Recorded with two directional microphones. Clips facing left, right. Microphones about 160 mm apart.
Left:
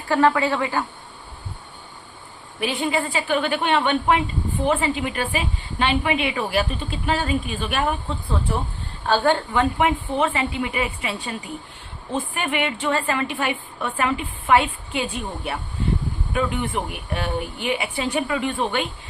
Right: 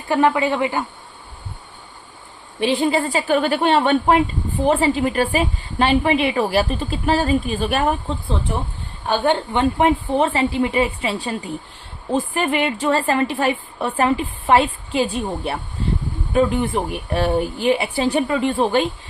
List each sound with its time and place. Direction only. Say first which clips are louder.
0.1 s a man's voice: right 1 dB; 15° right (ahead or behind)
2.6 s a woman's voice: right 5 dB; 30° right (ahead or behind)
9.0 s a woman's voice: right 1 dB; 15° right (ahead or behind); by 18.9 s 35° right (ahead or behind)